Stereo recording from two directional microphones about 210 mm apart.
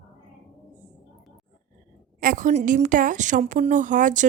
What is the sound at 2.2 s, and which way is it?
A woman's voice, 40° right (ahead or behind).